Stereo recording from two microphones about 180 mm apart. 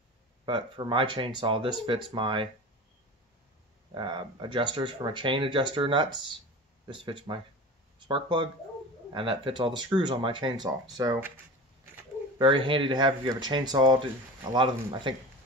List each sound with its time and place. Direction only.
0.5 s speech: 25° right (ahead or behind)
3.9 s speech: 25° right (ahead or behind)
12.4 s speech: 25° right (ahead or behind)